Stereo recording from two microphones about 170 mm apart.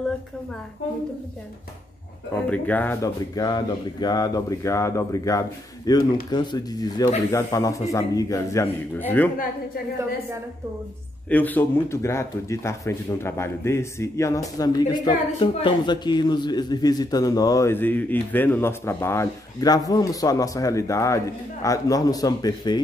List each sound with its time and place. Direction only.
2.5 s speech: 10° left (ahead or behind)
11.2 s speech: 10° left (ahead or behind)